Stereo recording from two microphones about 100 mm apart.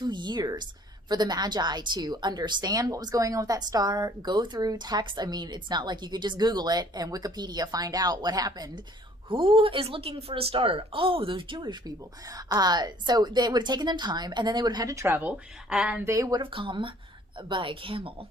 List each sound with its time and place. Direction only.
0.0 s a woman's voice: 50° right (ahead or behind)
9.3 s a woman's voice: 55° right (ahead or behind); by 15.0 s 35° right (ahead or behind)
15.0 s speech: 20° right (ahead or behind)
16.0 s speech: 30° right (ahead or behind)
16.3 s a woman's voice: 60° right (ahead or behind)